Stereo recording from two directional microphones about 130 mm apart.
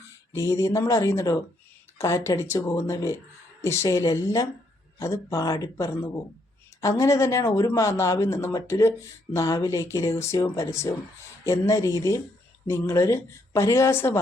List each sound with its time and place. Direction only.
0.3 s speech: 25° left (ahead or behind)